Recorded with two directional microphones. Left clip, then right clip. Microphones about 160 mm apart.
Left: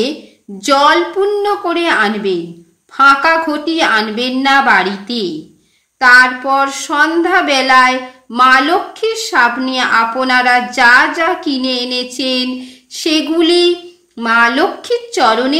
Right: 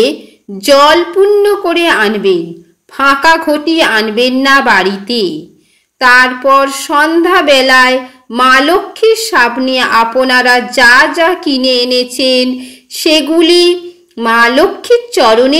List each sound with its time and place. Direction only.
0.6 s a woman's voice: 20° right (ahead or behind)